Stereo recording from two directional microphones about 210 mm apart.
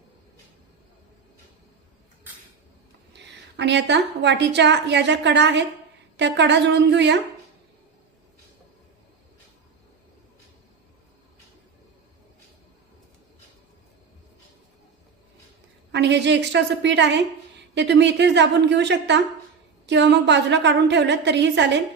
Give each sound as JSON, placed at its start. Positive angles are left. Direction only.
{"t": 3.6, "sound": "a woman's voice", "side_deg": -55}
{"t": 15.9, "sound": "a woman's voice", "side_deg": -55}